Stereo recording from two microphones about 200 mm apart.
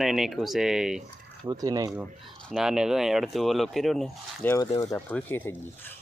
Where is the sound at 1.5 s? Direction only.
20° right (ahead or behind).